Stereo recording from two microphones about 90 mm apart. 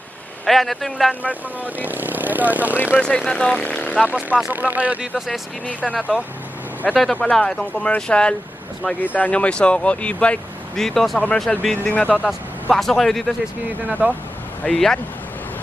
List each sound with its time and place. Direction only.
0.4 s a man's voice: centre (ahead or behind)
1.6 s speech: 20° right (ahead or behind)
3.0 s speech: 10° left (ahead or behind)
4.0 s speech: 15° right (ahead or behind)
5.1 s a man's voice: centre (ahead or behind)
6.9 s a man's voice: 5° left (ahead or behind)
11.8 s speech: 20° left (ahead or behind)
12.7 s a man's voice: 5° left (ahead or behind)
14.0 s speech: 15° right (ahead or behind)
14.6 s speech: 5° left (ahead or behind)